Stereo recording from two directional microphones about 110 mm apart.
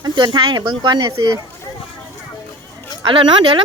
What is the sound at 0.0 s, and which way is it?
Speech, 45° right (ahead or behind).